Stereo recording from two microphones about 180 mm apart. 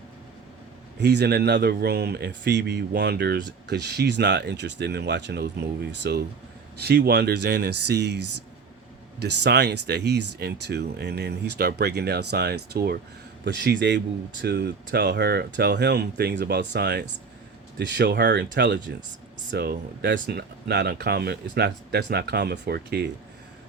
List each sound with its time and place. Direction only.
0.9 s speech: 70° right (ahead or behind)
13.4 s speech: 75° right (ahead or behind)
14.4 s speech: 65° right (ahead or behind)